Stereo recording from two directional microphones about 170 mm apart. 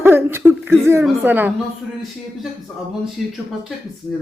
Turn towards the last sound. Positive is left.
turn(degrees=0)  # may be behind; listen again after turning